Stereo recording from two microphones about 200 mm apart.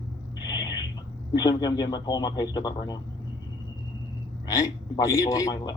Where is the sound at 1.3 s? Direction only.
20° left (ahead or behind).